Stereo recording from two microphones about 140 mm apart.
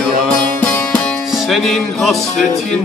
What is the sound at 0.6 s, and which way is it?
Music, 10° left (ahead or behind).